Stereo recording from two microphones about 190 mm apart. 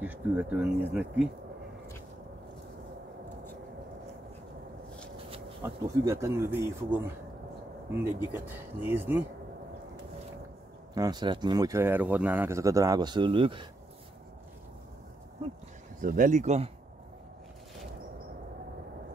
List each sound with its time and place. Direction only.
0.0 s speech: 10° right (ahead or behind)
5.6 s speech: 15° right (ahead or behind)
11.0 s speech: 20° right (ahead or behind)
16.0 s speech: 45° right (ahead or behind)